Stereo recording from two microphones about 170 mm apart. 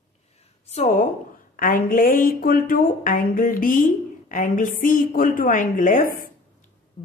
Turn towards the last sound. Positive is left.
turn(degrees=55)  # may be behind; listen again after turning